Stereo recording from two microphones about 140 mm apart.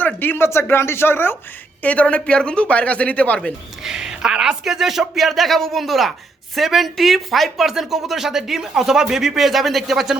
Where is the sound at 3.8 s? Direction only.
5° right (ahead or behind).